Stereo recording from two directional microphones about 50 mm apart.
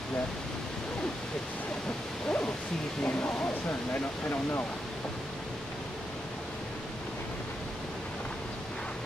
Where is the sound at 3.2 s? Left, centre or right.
Left.